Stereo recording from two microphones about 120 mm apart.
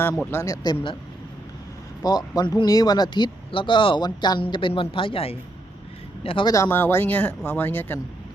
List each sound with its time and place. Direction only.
0.2 s speech: 20° left (ahead or behind); by 0.9 s 35° left (ahead or behind)
2.0 s speech: 30° left (ahead or behind)
6.7 s speech: 15° left (ahead or behind)